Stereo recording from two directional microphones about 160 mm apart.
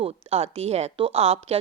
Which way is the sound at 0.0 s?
40° right (ahead or behind).